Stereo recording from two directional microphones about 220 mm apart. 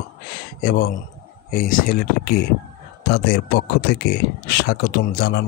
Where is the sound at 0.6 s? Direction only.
45° left (ahead or behind).